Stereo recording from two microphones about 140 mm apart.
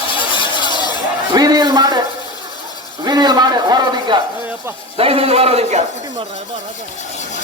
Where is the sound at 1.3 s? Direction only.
30° right (ahead or behind).